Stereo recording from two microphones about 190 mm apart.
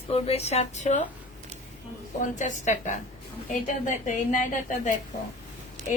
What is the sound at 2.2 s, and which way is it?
Speech, 40° left (ahead or behind).